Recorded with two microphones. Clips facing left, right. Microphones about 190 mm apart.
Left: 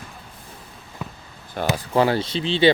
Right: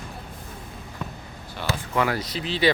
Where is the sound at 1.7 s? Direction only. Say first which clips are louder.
Left 5 dB; 35° left (ahead or behind).